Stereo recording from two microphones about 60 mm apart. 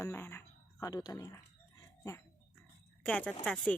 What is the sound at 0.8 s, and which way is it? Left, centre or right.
Speech, left.